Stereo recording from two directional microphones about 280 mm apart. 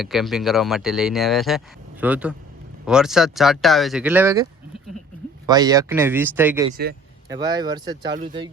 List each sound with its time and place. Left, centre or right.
0.0 s speech: centre
5.5 s speech: centre